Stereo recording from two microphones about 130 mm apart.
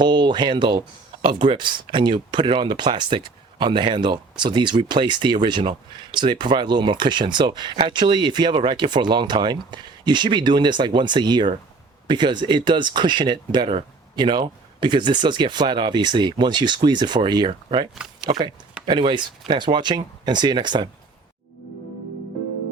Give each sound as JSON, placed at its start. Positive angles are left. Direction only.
{"t": 0.0, "sound": "speech", "side_deg": -35}